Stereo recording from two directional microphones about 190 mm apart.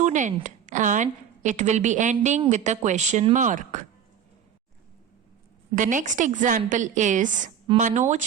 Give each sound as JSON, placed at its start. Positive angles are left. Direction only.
{"t": 0.0, "sound": "a sound", "side_deg": -40}
{"t": 0.4, "sound": "a woman's voice", "side_deg": -40}
{"t": 5.7, "sound": "a woman's voice", "side_deg": -45}